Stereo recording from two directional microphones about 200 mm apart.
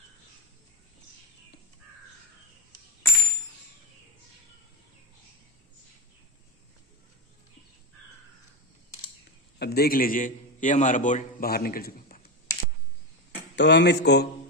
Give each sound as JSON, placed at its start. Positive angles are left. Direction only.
{"t": 9.6, "sound": "a man's voice", "side_deg": 50}
{"t": 13.6, "sound": "speech", "side_deg": 60}